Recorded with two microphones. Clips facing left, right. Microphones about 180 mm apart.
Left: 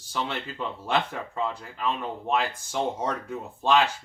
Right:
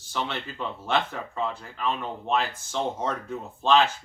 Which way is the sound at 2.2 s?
15° left (ahead or behind).